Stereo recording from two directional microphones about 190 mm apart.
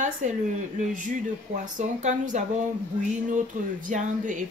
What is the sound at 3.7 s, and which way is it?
Speech, 40° right (ahead or behind).